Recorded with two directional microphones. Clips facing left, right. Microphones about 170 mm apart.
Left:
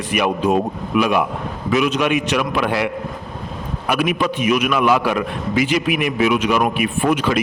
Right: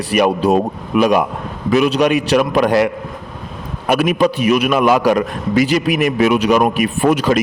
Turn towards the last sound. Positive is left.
turn(degrees=-40)  # may be behind; listen again after turning